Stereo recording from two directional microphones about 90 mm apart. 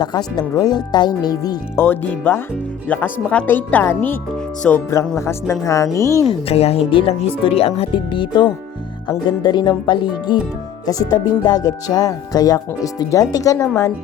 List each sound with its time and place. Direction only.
0.0 s speech: 50° left (ahead or behind)
1.7 s speech: 25° left (ahead or behind)
5.1 s speech: 35° left (ahead or behind)
6.7 s speech: 90° left
7.8 s speech: 75° left (ahead or behind)
9.0 s speech: 55° left (ahead or behind)
10.8 s speech: 45° left (ahead or behind)